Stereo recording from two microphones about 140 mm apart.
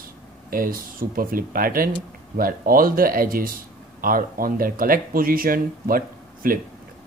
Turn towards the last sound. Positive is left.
turn(degrees=-90)